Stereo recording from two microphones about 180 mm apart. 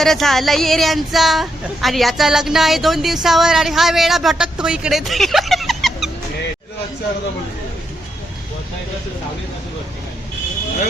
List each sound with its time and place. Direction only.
0.0 s a woman's voice: centre (ahead or behind)